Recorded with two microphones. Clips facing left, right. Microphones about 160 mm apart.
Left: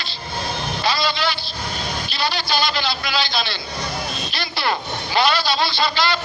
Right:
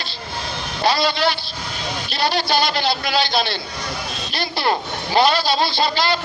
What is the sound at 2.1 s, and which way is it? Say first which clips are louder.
A man's voice: right 4 dB; 55° right (ahead or behind).